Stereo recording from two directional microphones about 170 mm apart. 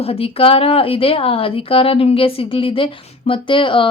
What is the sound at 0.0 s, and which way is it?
Speech, 35° left (ahead or behind).